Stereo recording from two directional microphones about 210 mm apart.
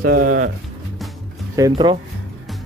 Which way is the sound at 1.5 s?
20° right (ahead or behind).